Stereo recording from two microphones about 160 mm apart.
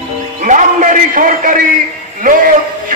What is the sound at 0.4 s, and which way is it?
A man's voice, 55° right (ahead or behind).